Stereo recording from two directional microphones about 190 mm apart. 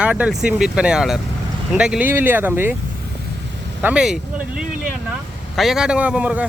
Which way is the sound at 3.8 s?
5° right (ahead or behind).